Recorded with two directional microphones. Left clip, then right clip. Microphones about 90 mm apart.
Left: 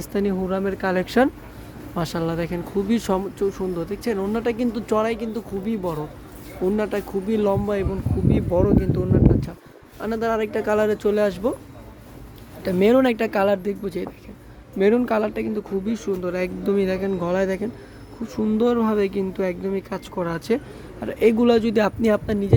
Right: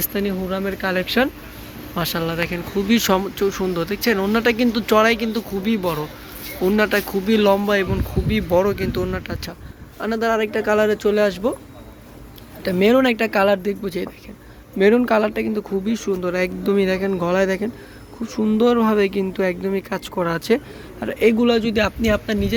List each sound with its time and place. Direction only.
0.1 s speech: 75° left (ahead or behind)
2.0 s speech: 50° left (ahead or behind)
2.8 s speech: 30° left (ahead or behind)
3.3 s speech: 20° left (ahead or behind)
10.1 s speech: 30° left (ahead or behind)
12.6 s speech: 35° left (ahead or behind)
13.4 s speech: 25° left (ahead or behind)
21.3 s a man's voice: 90° left